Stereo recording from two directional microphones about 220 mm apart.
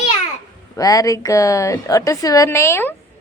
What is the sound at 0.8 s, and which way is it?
A woman's voice, 15° left (ahead or behind).